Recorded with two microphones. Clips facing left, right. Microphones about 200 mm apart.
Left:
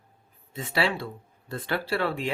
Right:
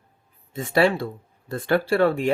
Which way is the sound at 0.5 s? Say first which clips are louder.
Right 8 dB; 45° right (ahead or behind).